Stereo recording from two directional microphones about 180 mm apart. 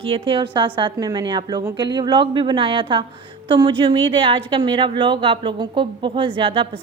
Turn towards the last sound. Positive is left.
turn(degrees=-30)  # may be behind; listen again after turning